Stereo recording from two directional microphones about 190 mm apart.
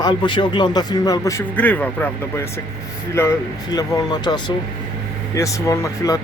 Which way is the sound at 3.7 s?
20° left (ahead or behind).